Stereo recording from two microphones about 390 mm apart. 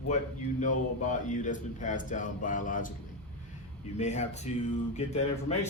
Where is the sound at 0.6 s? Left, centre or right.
Centre.